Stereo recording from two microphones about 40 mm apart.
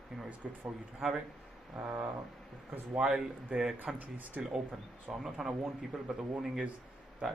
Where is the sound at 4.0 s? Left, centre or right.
Right.